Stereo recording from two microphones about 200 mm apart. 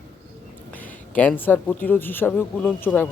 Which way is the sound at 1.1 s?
10° left (ahead or behind).